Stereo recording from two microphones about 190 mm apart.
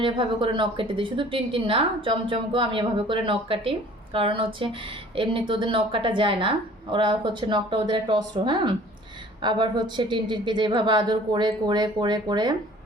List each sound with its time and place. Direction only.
0.0 s a woman's voice: 25° right (ahead or behind)